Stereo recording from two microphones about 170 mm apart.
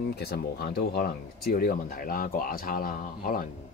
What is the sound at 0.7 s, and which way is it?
A man's voice, 65° left (ahead or behind).